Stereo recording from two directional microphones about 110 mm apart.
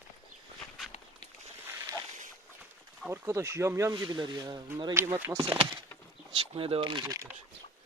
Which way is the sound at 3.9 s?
40° right (ahead or behind).